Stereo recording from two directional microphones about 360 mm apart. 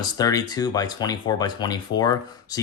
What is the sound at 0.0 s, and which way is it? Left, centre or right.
Speech, centre.